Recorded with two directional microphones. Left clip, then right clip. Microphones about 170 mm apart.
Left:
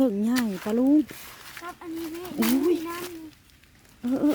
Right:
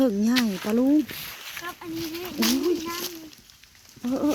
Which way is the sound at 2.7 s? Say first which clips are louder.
Even; 50° left (ahead or behind).